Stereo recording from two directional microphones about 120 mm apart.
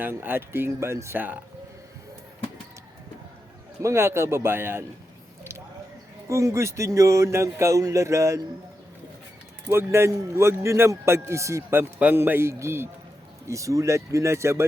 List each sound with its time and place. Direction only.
0.0 s a man's voice: 15° right (ahead or behind)
3.8 s a man's voice: 20° right (ahead or behind)
5.4 s a sound: 20° right (ahead or behind)
6.2 s a man's voice: 25° right (ahead or behind)
9.6 s a man's voice: 20° right (ahead or behind)